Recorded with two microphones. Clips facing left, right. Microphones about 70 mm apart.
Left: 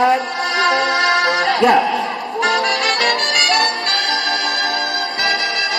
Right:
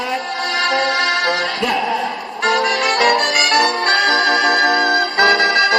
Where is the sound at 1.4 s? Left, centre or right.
Left.